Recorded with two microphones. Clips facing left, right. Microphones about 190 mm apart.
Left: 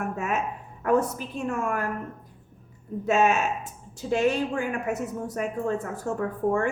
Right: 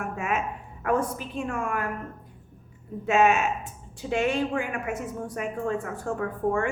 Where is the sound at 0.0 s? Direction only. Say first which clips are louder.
Left 1 dB; 40° left (ahead or behind).